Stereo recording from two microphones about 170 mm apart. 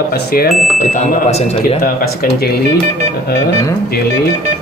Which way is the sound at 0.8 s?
45° left (ahead or behind).